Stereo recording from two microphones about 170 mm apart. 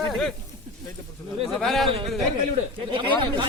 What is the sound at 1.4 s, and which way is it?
Speech, centre (ahead or behind).